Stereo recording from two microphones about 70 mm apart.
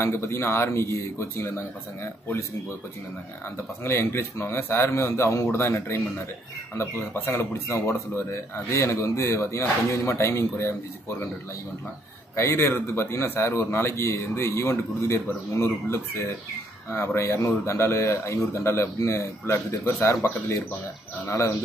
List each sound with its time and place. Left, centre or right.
0.0 s speech: left
3.4 s speech: left
12.4 s speech: left